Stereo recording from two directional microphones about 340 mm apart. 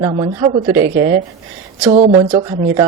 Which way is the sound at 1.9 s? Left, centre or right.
Centre.